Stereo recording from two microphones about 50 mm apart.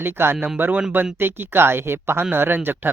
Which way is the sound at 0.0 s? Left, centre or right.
Right.